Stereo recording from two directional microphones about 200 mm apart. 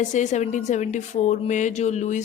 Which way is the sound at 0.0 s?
35° left (ahead or behind).